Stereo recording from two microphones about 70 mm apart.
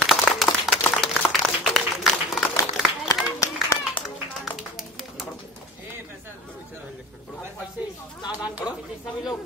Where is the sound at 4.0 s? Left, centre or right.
Left.